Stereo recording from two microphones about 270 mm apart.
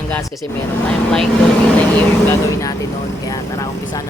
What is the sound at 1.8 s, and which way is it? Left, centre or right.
Speech, centre.